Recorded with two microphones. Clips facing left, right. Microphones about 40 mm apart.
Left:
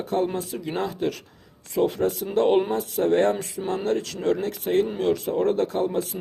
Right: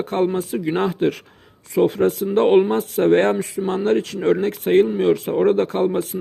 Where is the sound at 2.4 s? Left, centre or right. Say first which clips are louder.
Right 5 dB; right.